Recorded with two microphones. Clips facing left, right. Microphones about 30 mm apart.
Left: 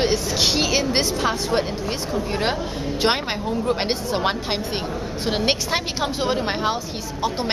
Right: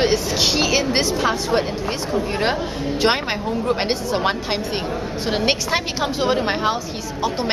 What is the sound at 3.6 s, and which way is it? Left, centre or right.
Speech, centre.